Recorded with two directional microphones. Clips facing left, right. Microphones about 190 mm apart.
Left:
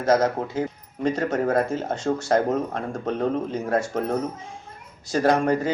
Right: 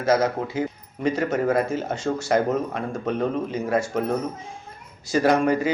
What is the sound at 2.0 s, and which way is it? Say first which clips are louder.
Speech: left 1 dB; 90° right.